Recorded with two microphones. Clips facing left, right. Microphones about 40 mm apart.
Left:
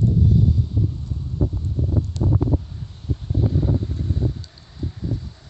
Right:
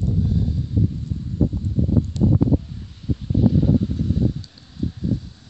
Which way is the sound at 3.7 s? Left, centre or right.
Left.